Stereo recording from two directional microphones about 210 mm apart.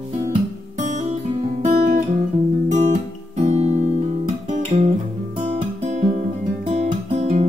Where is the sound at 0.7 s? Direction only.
35° right (ahead or behind).